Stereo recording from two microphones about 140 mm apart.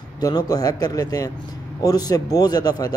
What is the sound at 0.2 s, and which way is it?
Speech, 30° left (ahead or behind).